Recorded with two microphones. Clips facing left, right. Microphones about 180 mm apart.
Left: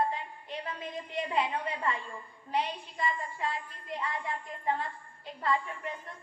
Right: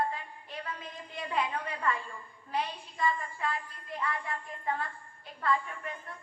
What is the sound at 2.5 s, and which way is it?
A woman's voice, 25° left (ahead or behind).